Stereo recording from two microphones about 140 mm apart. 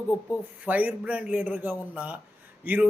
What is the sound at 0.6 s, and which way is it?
A man's voice, 10° right (ahead or behind).